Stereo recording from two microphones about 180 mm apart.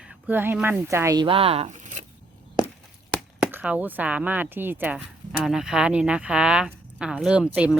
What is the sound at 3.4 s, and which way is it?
Speech, 5° right (ahead or behind).